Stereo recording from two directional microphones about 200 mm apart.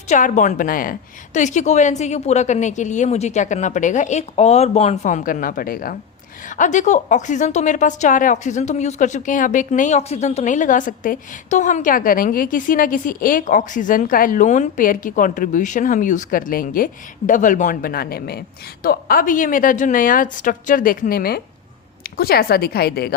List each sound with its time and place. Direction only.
0.1 s a woman's voice: 40° left (ahead or behind)